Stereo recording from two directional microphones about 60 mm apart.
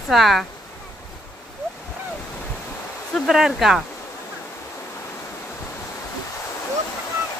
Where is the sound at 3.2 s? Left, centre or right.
Centre.